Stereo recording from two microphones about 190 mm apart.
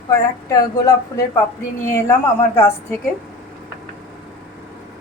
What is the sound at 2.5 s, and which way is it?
Speech, 10° left (ahead or behind).